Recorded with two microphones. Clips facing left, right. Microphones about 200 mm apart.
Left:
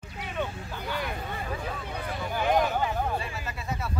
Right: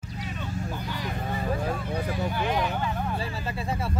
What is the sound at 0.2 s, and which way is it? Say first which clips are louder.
Vehicle: left 1 dB; 60° left (ahead or behind).